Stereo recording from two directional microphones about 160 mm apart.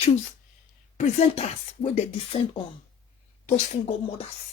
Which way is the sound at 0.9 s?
40° left (ahead or behind).